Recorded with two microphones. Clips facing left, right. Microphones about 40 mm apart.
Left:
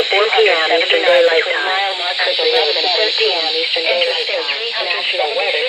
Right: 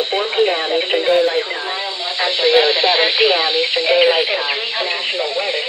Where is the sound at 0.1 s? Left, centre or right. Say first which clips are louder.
Left 6 dB; left.